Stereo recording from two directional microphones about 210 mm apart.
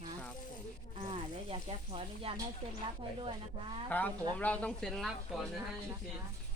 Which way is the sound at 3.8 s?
5° left (ahead or behind).